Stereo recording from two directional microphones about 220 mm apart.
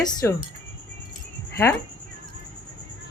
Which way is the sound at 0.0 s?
15° left (ahead or behind).